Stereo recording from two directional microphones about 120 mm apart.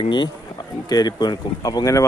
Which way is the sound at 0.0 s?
40° left (ahead or behind).